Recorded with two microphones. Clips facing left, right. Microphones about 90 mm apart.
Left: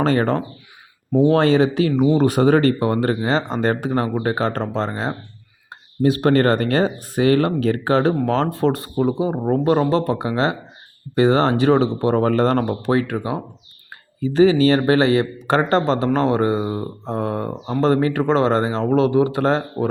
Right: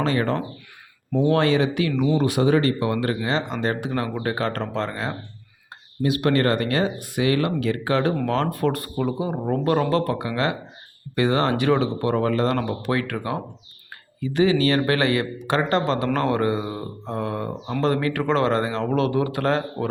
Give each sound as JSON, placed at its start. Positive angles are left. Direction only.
{"t": 0.0, "sound": "speech", "side_deg": 35}
{"t": 2.1, "sound": "speech", "side_deg": 40}
{"t": 14.2, "sound": "speech", "side_deg": 30}